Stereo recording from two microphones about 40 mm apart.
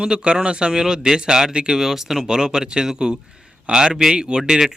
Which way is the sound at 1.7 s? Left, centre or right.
Centre.